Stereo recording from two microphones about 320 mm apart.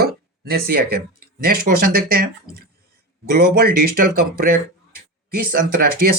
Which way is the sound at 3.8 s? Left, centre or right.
Right.